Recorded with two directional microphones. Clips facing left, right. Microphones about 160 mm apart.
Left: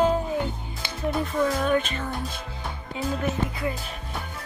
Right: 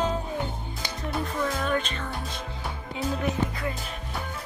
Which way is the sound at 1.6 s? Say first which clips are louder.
Left 4 dB; 5° left (ahead or behind).